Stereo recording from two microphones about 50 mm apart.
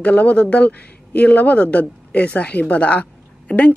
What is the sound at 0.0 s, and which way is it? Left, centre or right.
A man's voice, left.